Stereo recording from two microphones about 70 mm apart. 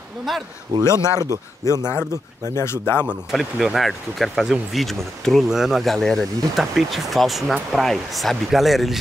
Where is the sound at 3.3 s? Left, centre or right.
Centre.